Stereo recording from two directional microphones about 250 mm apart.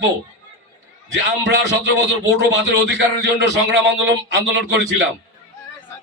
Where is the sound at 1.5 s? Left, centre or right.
Right.